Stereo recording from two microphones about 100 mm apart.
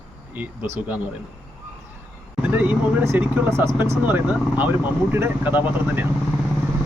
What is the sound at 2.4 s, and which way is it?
Speech, 15° right (ahead or behind).